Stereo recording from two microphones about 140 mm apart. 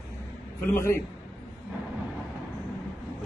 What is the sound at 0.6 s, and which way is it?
Speech, 20° left (ahead or behind).